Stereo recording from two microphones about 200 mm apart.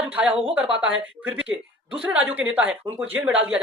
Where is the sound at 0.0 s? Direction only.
10° right (ahead or behind).